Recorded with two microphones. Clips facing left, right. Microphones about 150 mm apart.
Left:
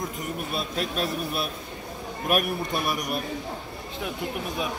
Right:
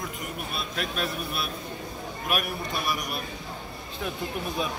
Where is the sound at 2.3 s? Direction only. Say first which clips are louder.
Left 5 dB; 45° left (ahead or behind).